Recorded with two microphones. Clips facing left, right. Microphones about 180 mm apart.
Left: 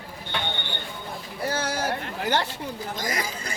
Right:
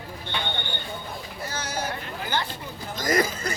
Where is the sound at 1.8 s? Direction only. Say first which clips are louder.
Left 5 dB; 75° left (ahead or behind).